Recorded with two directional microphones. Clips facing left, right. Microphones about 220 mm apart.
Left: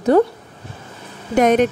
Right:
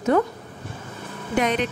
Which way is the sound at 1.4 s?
45° left (ahead or behind).